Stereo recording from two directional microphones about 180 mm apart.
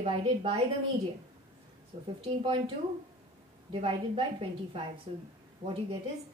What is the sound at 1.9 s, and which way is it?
Speech, 30° right (ahead or behind).